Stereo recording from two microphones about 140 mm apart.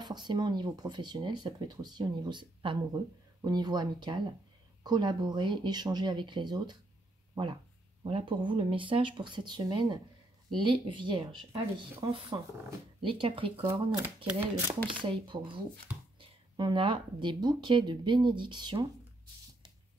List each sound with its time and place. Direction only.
0.0 s speech: 30° right (ahead or behind)
8.0 s speech: 35° right (ahead or behind)
13.6 s speech: 15° right (ahead or behind)
15.0 s speech: 35° right (ahead or behind)